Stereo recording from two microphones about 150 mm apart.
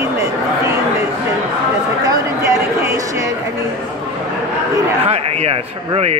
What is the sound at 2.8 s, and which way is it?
Speech, 20° right (ahead or behind).